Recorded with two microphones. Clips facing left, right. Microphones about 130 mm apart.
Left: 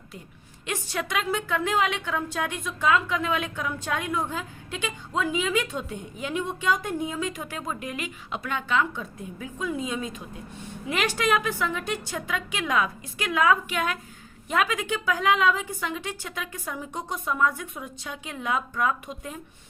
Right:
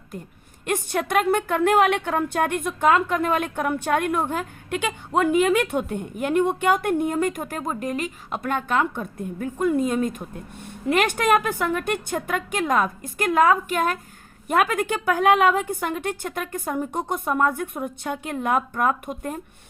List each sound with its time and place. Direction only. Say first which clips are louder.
0.6 s a woman's voice: right 6 dB; 50° right (ahead or behind)